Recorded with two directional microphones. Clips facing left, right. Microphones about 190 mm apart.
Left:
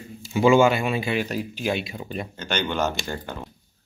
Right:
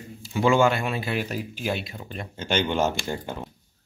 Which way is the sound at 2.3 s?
25° right (ahead or behind).